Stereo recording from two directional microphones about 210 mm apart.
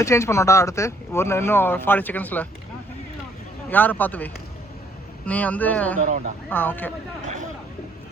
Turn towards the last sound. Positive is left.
turn(degrees=-35)  # may be behind; listen again after turning